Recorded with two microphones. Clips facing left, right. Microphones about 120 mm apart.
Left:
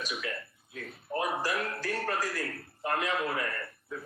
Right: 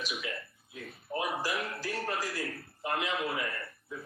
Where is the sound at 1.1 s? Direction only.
35° left (ahead or behind).